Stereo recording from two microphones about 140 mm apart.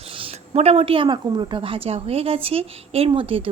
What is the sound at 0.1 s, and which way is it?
Speech, 40° right (ahead or behind).